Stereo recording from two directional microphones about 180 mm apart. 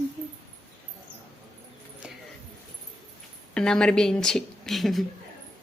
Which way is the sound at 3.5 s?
5° left (ahead or behind).